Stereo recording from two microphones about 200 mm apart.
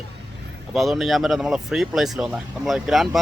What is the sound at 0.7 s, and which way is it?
Speech, centre (ahead or behind).